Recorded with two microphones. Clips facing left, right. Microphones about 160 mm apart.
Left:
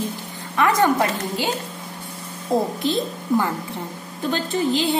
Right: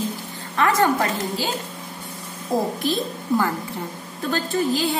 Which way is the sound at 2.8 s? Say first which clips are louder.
Left 1 dB; 20° left (ahead or behind).